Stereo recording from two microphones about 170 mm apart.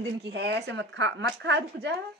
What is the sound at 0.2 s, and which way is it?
Speech, 75° right (ahead or behind).